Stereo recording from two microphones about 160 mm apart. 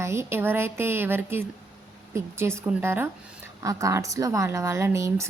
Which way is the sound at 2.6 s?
15° right (ahead or behind).